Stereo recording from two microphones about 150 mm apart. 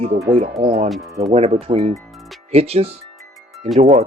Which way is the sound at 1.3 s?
45° right (ahead or behind).